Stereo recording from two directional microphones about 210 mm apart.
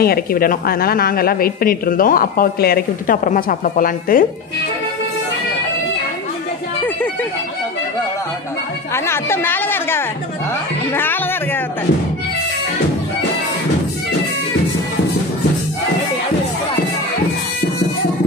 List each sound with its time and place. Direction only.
0.0 s a woman's voice: 45° left (ahead or behind)
8.9 s chatter: 10° left (ahead or behind)
10.9 s speech: 10° left (ahead or behind)